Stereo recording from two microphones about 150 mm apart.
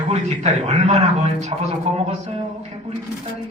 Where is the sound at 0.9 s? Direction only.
45° right (ahead or behind).